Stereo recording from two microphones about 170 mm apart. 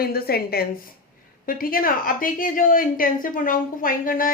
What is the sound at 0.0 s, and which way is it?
A woman's voice, 65° left (ahead or behind).